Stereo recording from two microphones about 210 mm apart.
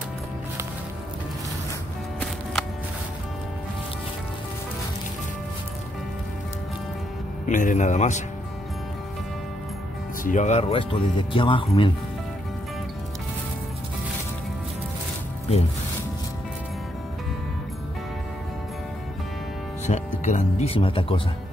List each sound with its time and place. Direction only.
7.4 s a man's voice: 40° left (ahead or behind)
10.2 s speech: 35° left (ahead or behind)
19.9 s speech: 35° left (ahead or behind)